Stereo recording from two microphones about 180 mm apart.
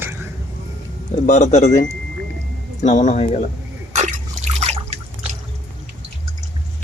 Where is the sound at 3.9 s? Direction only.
40° right (ahead or behind).